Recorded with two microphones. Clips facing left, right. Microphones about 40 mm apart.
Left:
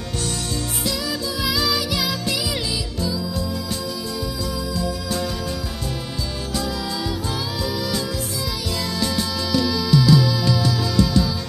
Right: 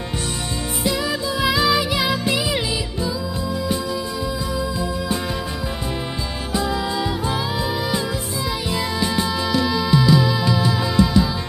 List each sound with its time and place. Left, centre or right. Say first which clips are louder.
0.8 s music: right 5 dB; right
6.5 s music: right 5 dB; right
8.7 s music: right 2 dB; right